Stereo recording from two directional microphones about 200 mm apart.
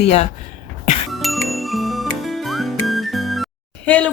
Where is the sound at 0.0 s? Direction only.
35° left (ahead or behind).